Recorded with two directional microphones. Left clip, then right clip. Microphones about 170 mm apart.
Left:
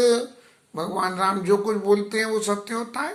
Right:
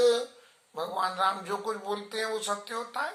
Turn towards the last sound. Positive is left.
turn(degrees=20)  # may be behind; listen again after turning